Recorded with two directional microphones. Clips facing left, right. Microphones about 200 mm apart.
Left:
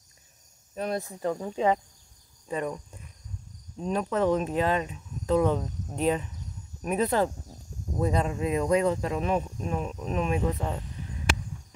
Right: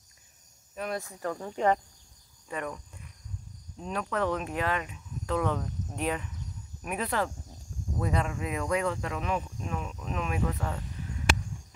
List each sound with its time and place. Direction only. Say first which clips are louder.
0.7 s speech: left 4 dB; 30° left (ahead or behind)
1.2 s speech: left 2 dB; 15° left (ahead or behind)
2.4 s cricket: left 5 dB; 25° left (ahead or behind)
3.8 s speech: left 5 dB; 25° left (ahead or behind)
10.4 s speech: left 3 dB; 20° left (ahead or behind)